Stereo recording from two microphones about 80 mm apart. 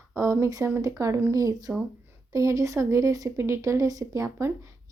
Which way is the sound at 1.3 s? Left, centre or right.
Right.